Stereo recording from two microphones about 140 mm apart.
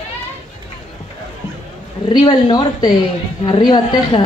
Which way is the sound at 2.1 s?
30° left (ahead or behind).